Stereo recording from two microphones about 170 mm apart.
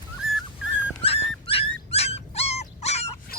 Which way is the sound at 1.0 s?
35° left (ahead or behind).